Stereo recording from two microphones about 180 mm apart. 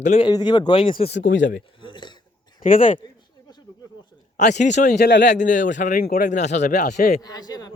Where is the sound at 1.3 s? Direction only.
90° left.